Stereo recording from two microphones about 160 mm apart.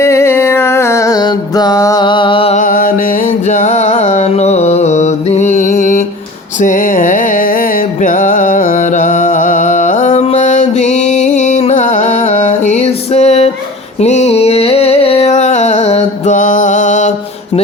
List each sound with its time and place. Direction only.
0.0 s music: 15° left (ahead or behind); by 2.6 s 35° left (ahead or behind)
2.6 s music: 60° left (ahead or behind)
3.5 s music: 50° left (ahead or behind)
6.6 s a sound: 55° left (ahead or behind)
8.0 s music: 55° left (ahead or behind)
14.0 s a sound: 45° left (ahead or behind)